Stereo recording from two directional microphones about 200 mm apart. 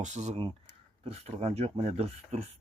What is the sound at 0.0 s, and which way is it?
Speech, 35° right (ahead or behind).